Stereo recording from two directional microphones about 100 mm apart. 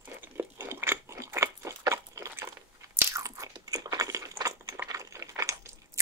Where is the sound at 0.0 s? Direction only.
20° right (ahead or behind).